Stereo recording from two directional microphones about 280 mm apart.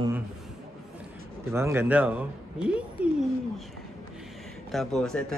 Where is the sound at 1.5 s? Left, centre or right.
Centre.